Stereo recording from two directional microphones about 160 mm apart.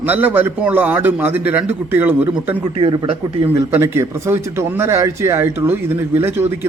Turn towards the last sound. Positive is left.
turn(degrees=-15)  # may be behind; listen again after turning